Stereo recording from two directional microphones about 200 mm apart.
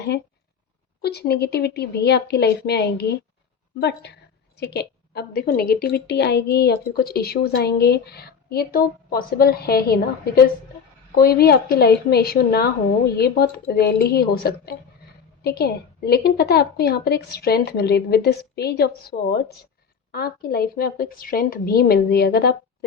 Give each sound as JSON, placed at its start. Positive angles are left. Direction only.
{"t": 1.0, "sound": "a woman's voice", "side_deg": 55}